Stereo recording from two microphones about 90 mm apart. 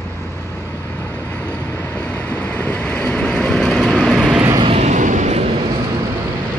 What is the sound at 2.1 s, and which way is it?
Vehicle, 15° left (ahead or behind).